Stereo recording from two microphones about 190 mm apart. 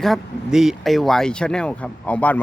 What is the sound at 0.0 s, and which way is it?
Speech, centre (ahead or behind).